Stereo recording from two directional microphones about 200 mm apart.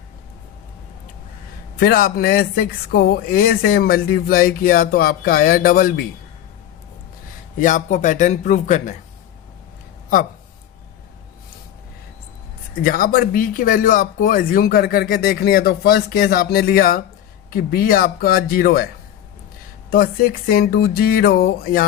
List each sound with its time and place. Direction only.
1.8 s speech: 45° left (ahead or behind)
7.6 s a man's voice: 40° left (ahead or behind)
12.8 s speech: 45° left (ahead or behind)
19.9 s speech: 50° left (ahead or behind)